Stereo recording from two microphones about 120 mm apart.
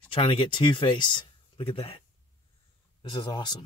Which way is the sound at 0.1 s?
45° left (ahead or behind).